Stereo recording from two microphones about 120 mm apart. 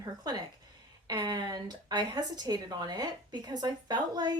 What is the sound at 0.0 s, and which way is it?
Speech, 30° right (ahead or behind).